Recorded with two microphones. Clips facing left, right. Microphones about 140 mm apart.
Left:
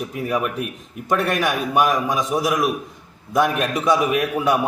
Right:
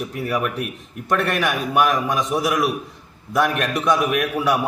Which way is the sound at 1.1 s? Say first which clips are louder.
Left 1 dB; 10° left (ahead or behind).